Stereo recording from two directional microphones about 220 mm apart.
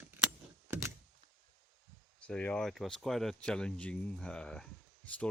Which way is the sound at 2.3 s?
5° left (ahead or behind).